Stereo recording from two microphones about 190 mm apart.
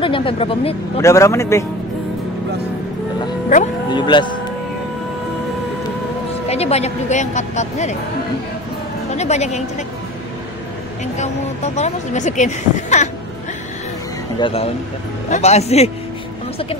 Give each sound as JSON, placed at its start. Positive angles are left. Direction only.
{"t": 0.0, "sound": "speech", "side_deg": 30}
{"t": 1.0, "sound": "a man's voice", "side_deg": 15}
{"t": 3.9, "sound": "speech", "side_deg": 25}
{"t": 6.5, "sound": "speech", "side_deg": 35}
{"t": 9.1, "sound": "a woman's voice", "side_deg": 35}
{"t": 11.1, "sound": "speech", "side_deg": 35}
{"t": 14.4, "sound": "speech", "side_deg": 30}